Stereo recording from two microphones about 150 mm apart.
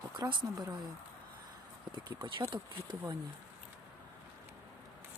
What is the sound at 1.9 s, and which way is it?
Speech, 30° right (ahead or behind).